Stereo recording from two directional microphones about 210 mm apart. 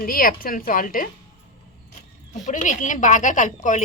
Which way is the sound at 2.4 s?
35° left (ahead or behind).